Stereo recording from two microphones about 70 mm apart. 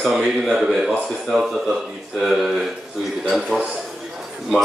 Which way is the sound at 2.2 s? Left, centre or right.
Centre.